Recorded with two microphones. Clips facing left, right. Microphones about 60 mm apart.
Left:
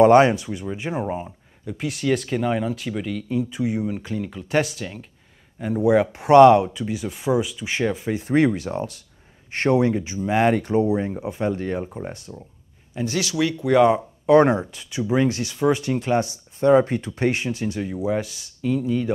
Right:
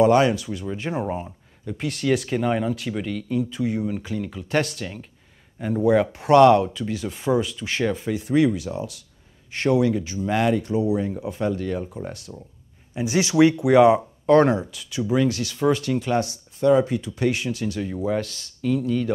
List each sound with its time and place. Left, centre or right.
0.0 s speech: left; by 3.3 s centre
3.3 s speech: centre
8.1 s speech: left
10.6 s speech: left
11.0 s speech: left
12.9 s speech: centre
13.7 s speech: centre
14.4 s speech: left
16.5 s speech: left
17.8 s speech: centre